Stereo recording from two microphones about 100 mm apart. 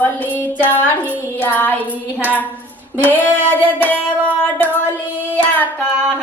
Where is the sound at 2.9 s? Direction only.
20° right (ahead or behind).